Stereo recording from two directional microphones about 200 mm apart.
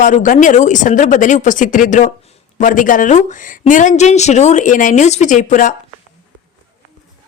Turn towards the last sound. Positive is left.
turn(degrees=40)  # may be behind; listen again after turning